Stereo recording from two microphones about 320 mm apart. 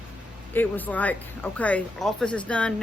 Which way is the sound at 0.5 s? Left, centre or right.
Centre.